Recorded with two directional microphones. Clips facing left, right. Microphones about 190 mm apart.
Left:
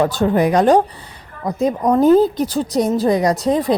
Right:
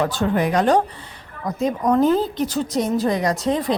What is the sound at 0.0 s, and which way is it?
A woman's voice, 40° left (ahead or behind).